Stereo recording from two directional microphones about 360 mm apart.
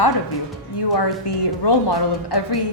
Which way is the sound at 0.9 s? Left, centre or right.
Left.